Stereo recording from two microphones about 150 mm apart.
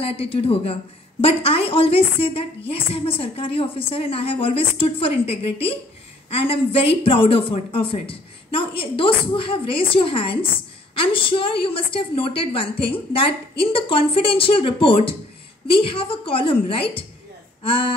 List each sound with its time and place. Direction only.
0.0 s a woman's voice: 40° left (ahead or behind)